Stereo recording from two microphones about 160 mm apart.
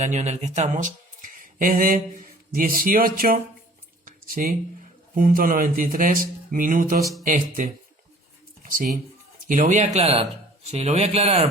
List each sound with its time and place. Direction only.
0.0 s speech: 45° right (ahead or behind); by 3.3 s 65° right (ahead or behind)
4.0 s a sound: 60° right (ahead or behind)
5.1 s speech: 60° right (ahead or behind); by 11.4 s 40° right (ahead or behind)